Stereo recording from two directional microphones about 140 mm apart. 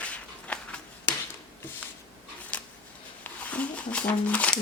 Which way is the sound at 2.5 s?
10° left (ahead or behind).